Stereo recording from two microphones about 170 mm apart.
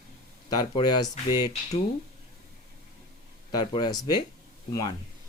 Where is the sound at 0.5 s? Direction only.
25° left (ahead or behind).